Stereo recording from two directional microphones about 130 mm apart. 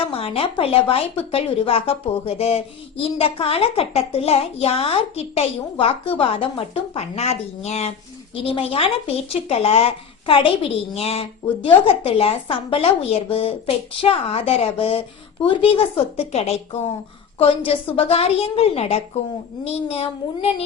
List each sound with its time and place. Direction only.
0.1 s a woman's voice: 45° left (ahead or behind)